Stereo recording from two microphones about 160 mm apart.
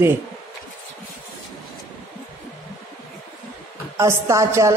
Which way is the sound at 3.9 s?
15° right (ahead or behind).